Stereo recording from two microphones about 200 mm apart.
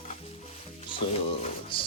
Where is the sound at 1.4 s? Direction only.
25° left (ahead or behind).